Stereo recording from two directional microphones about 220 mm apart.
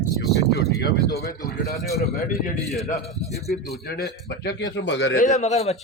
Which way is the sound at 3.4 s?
Centre (ahead or behind).